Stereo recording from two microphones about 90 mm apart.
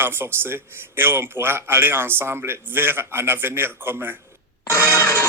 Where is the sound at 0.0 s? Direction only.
25° right (ahead or behind).